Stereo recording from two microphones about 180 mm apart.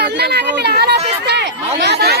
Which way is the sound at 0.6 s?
65° right (ahead or behind).